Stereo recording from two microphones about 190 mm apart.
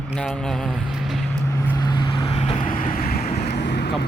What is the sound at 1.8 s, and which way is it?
Vehicle, 25° left (ahead or behind).